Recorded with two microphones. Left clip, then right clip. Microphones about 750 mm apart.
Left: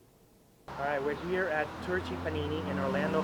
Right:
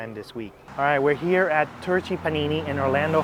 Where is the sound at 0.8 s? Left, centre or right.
Right.